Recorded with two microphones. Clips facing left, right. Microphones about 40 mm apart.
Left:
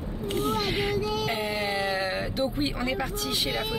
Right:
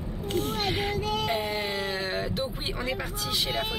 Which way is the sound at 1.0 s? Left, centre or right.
Right.